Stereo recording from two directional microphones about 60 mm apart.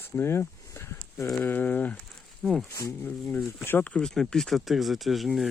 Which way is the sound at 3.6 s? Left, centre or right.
Left.